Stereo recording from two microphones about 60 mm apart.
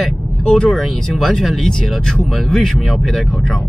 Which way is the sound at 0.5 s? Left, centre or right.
Centre.